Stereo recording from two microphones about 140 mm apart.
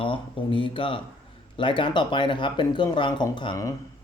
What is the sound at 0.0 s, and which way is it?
Speech, 40° left (ahead or behind).